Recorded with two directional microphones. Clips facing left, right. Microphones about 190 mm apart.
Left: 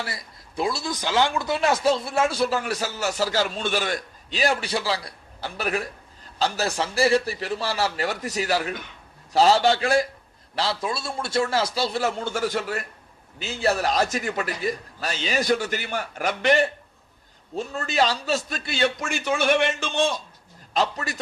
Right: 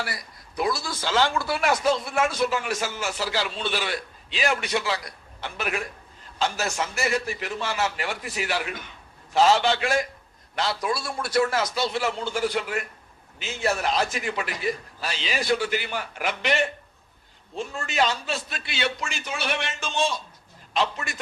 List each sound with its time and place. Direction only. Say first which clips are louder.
0.0 s a man's voice: even; 25° left (ahead or behind); by 20.1 s 60° left (ahead or behind)
20.7 s speech: left 2 dB; 40° left (ahead or behind)